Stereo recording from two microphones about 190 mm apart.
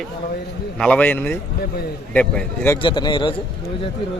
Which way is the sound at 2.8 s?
25° left (ahead or behind).